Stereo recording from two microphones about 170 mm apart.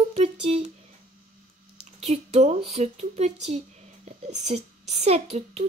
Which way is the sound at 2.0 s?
40° right (ahead or behind).